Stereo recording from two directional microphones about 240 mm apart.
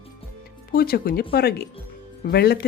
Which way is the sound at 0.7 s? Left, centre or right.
Left.